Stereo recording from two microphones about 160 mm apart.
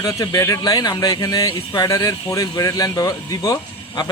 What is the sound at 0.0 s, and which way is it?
A man's voice, 20° left (ahead or behind).